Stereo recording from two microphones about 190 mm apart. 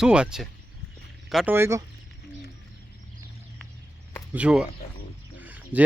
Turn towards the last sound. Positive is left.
turn(degrees=-10)  # may be behind; listen again after turning